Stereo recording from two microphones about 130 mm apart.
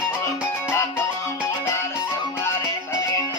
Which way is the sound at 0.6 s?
15° left (ahead or behind).